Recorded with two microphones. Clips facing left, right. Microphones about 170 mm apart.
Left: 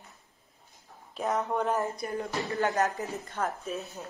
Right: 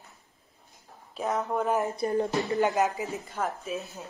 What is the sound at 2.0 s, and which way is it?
Speech, 30° right (ahead or behind).